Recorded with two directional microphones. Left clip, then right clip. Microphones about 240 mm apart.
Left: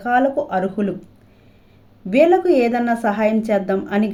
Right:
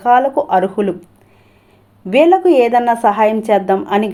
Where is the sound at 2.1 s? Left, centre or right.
Centre.